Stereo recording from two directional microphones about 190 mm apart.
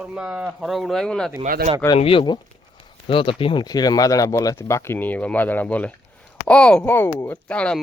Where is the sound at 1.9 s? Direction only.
30° left (ahead or behind).